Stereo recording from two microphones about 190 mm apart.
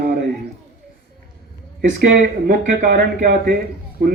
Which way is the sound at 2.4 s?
45° right (ahead or behind).